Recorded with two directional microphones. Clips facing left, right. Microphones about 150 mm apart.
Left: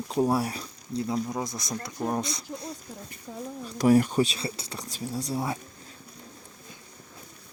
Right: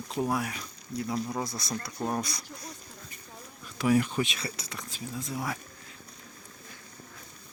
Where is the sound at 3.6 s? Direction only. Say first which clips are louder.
Left 5 dB; 40° left (ahead or behind).